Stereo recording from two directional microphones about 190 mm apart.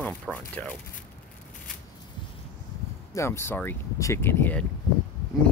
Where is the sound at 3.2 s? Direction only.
15° left (ahead or behind).